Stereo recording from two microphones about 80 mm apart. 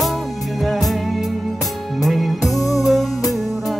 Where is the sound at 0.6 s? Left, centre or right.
Centre.